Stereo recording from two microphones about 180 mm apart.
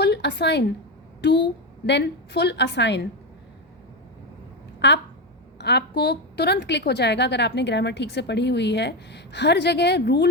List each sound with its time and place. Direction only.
0.0 s a sound: 70° left (ahead or behind)
1.2 s a woman's voice: 70° left (ahead or behind)
4.8 s a woman's voice: 75° left (ahead or behind)